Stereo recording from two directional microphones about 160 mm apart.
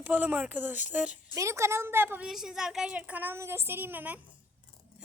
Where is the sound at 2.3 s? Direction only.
Centre (ahead or behind).